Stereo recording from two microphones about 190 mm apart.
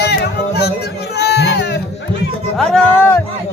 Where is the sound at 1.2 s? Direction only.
60° left (ahead or behind).